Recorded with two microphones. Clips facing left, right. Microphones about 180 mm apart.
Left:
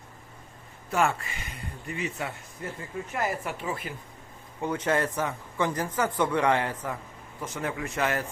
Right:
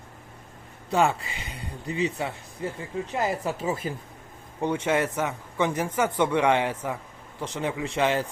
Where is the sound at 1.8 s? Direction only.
25° right (ahead or behind).